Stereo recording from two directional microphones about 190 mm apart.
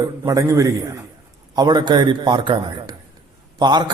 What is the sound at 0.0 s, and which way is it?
A man's voice, 15° right (ahead or behind).